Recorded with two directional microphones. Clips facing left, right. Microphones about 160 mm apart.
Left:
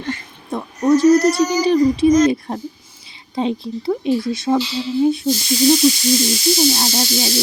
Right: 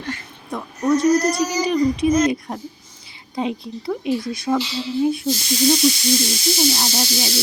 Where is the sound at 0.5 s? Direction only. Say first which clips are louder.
Left 4 dB; 30° left (ahead or behind).